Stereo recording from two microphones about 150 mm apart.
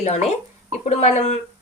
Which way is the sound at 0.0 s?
45° left (ahead or behind).